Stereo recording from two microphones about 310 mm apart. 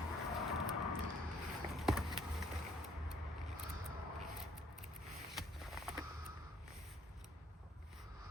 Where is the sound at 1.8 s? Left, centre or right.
Centre.